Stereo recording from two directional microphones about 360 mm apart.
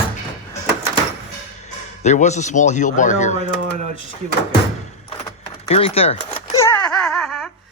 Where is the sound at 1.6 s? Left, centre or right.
Centre.